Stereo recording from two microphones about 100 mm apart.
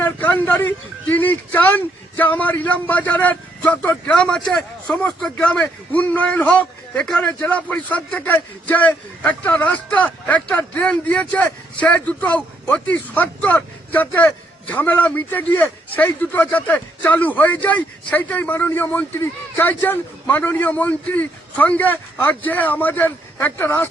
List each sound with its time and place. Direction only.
0.0 s a man's voice: 15° left (ahead or behind)